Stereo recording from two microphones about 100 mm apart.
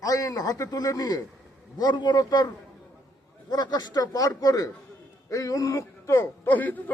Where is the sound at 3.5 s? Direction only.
45° left (ahead or behind).